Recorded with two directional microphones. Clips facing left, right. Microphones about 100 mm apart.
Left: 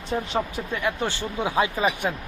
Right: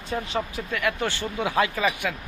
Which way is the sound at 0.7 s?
25° left (ahead or behind).